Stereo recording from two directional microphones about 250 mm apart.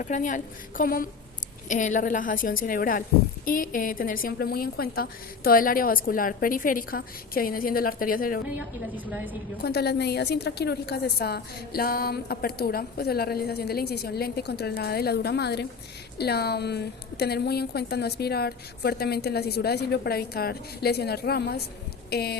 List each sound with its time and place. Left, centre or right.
0.0 s a woman's voice: left
9.6 s a woman's voice: left